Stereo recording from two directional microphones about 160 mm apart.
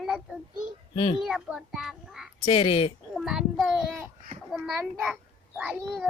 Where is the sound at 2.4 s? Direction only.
35° left (ahead or behind).